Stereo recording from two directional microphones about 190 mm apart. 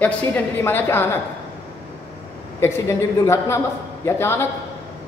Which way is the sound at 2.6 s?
15° left (ahead or behind).